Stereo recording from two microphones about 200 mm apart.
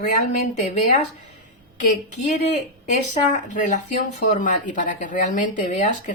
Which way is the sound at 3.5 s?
40° left (ahead or behind).